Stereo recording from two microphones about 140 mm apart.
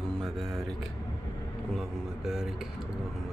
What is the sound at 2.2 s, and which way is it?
Speech, 5° right (ahead or behind).